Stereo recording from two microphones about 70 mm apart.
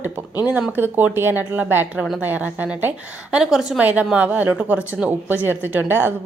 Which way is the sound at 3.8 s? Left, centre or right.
Right.